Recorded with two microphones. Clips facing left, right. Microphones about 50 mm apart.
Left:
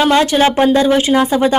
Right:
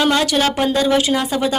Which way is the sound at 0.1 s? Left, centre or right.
Left.